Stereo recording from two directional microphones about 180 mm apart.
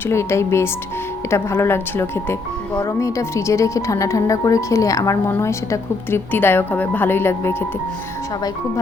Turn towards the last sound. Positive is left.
turn(degrees=15)  # may be behind; listen again after turning